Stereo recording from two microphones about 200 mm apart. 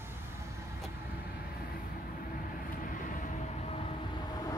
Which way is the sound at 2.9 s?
40° left (ahead or behind).